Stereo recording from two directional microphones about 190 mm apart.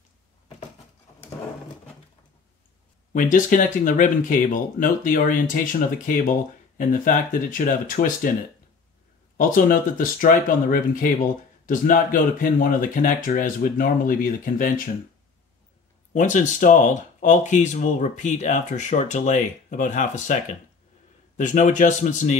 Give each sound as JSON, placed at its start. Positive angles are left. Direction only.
{"t": 3.1, "sound": "speech", "side_deg": 45}
{"t": 9.4, "sound": "speech", "side_deg": 45}
{"t": 16.1, "sound": "speech", "side_deg": 40}